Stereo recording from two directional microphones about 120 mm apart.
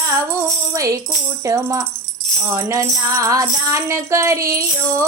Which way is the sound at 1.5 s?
25° right (ahead or behind).